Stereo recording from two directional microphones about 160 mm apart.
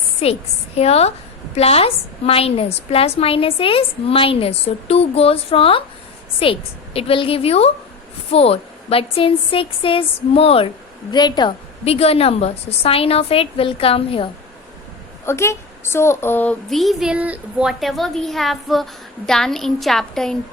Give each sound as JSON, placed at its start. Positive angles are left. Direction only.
{"t": 0.8, "sound": "a woman's voice", "side_deg": 40}
{"t": 11.1, "sound": "a woman's voice", "side_deg": 25}
{"t": 15.3, "sound": "speech", "side_deg": 15}